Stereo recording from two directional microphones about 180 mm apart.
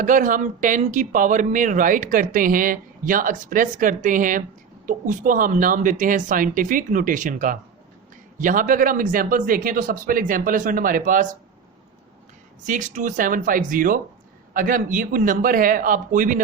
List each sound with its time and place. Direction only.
0.0 s speech: 45° right (ahead or behind)
12.6 s speech: 45° right (ahead or behind)